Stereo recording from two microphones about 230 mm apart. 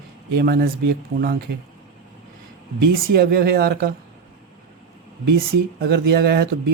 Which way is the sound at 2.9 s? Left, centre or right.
Right.